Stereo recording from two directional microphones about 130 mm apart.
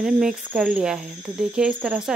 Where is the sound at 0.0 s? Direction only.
5° right (ahead or behind).